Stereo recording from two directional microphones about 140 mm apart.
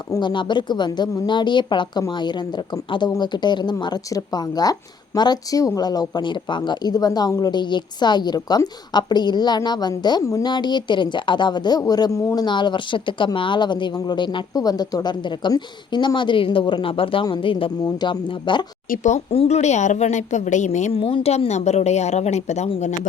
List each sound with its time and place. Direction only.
0.1 s a woman's voice: 35° left (ahead or behind)
18.9 s a woman's voice: 60° left (ahead or behind)
19.3 s a woman's voice: 50° left (ahead or behind)